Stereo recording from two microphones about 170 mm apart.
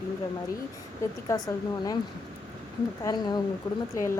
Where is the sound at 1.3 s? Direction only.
20° left (ahead or behind).